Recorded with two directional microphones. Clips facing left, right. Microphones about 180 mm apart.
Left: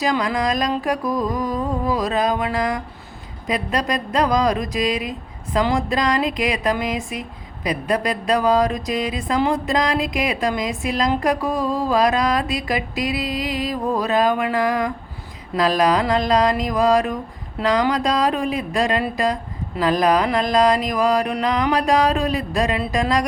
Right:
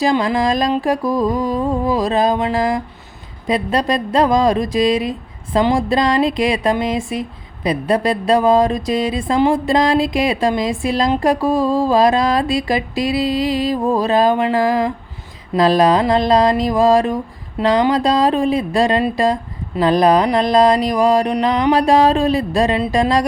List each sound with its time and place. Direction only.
0.0 s speech: 25° right (ahead or behind)